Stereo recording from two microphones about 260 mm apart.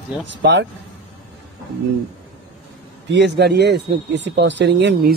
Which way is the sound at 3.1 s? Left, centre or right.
Right.